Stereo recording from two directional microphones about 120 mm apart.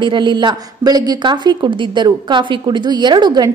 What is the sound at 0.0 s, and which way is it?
A woman's voice, 40° right (ahead or behind).